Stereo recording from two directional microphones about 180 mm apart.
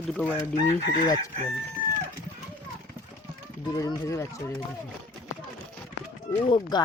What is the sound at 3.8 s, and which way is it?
Speech, 20° left (ahead or behind).